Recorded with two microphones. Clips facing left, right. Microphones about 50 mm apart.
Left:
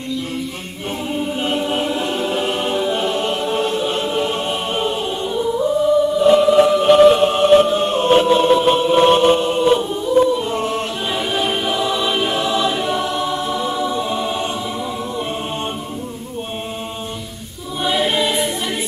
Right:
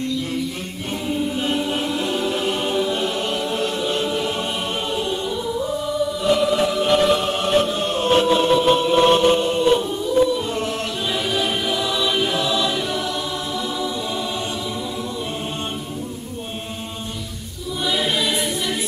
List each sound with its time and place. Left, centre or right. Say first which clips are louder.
1.3 s choir: left 2 dB; centre
17.8 s choir: left 4 dB; left